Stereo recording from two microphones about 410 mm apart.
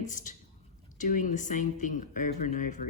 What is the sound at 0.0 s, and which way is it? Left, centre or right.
Speech, centre.